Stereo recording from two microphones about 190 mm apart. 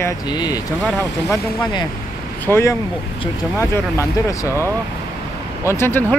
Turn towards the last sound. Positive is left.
turn(degrees=10)  # may be behind; listen again after turning